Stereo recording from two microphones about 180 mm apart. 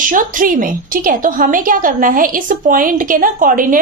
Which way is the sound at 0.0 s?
50° right (ahead or behind).